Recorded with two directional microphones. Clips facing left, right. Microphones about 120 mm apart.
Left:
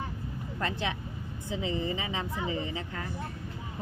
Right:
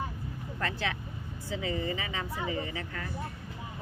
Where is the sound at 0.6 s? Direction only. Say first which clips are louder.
Left 1 dB; 20° left (ahead or behind).